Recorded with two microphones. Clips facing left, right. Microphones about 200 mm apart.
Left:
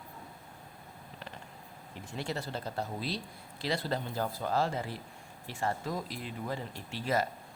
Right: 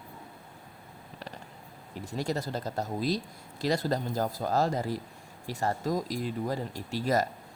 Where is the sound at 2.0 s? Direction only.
40° right (ahead or behind).